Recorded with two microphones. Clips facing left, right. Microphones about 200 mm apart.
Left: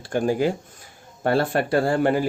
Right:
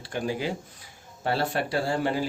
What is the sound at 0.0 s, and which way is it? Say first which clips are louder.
Speech: left 8 dB; 45° left (ahead or behind).